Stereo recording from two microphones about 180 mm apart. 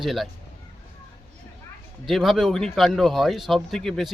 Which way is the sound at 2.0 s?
Centre (ahead or behind).